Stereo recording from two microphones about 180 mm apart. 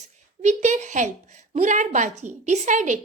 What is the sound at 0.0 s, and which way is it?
A woman's voice, 40° right (ahead or behind).